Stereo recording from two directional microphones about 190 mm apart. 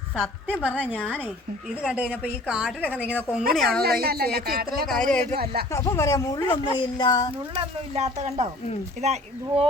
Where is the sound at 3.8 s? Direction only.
55° right (ahead or behind).